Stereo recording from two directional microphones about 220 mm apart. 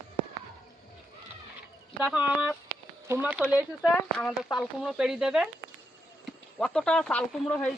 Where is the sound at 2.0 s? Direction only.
5° right (ahead or behind).